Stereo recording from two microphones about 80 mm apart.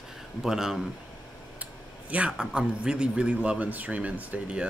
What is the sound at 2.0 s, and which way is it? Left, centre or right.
A man's voice, centre.